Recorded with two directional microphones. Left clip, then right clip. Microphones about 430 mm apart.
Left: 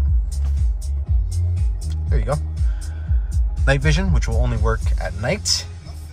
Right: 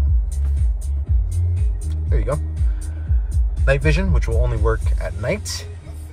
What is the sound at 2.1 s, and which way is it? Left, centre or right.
Music, centre.